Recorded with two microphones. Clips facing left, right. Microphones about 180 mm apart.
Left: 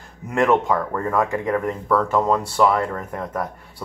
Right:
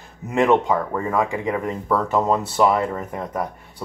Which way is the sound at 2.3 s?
25° right (ahead or behind).